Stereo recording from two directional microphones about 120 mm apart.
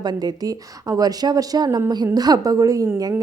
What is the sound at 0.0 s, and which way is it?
A woman's voice, 35° right (ahead or behind).